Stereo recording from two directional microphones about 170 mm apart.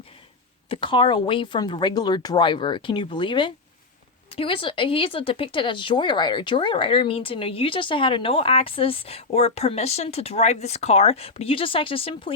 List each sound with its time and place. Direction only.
0.7 s speech: 30° left (ahead or behind)